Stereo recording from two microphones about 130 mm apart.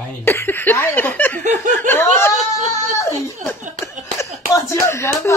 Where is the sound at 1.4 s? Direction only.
75° right (ahead or behind).